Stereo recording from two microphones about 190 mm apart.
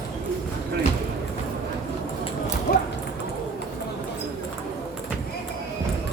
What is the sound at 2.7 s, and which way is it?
Dog, 45° left (ahead or behind).